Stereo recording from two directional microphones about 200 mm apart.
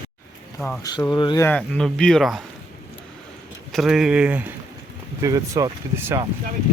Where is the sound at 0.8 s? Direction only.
20° left (ahead or behind).